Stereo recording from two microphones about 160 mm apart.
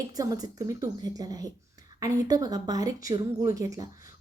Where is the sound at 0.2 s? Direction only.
20° right (ahead or behind).